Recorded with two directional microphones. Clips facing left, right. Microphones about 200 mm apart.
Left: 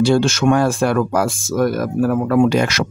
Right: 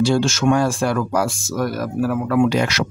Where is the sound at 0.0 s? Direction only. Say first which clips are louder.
Left 3 dB; 60° left (ahead or behind).